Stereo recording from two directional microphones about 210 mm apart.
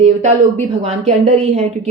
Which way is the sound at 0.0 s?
35° right (ahead or behind).